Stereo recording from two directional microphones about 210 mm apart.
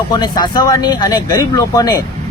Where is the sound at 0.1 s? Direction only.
20° left (ahead or behind).